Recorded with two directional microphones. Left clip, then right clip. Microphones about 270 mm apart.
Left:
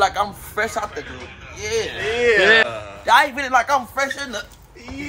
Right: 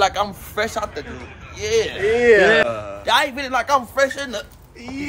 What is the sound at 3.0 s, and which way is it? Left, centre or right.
A man's voice, centre.